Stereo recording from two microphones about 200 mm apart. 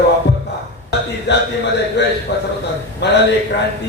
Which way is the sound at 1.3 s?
60° left (ahead or behind).